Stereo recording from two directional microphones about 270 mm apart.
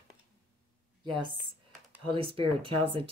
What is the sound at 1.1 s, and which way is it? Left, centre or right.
Speech, centre.